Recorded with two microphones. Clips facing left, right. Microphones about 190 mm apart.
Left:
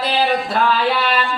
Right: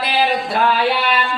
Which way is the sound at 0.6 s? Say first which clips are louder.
Right 2 dB; 15° right (ahead or behind).